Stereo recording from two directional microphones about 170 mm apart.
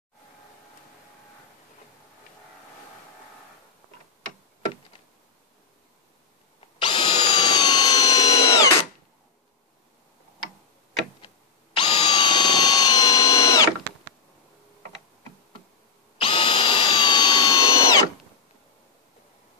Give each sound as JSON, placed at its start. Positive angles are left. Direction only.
{"t": 6.6, "sound": "power tool", "side_deg": 30}
{"t": 11.2, "sound": "drill", "side_deg": 30}
{"t": 16.2, "sound": "drill", "side_deg": 30}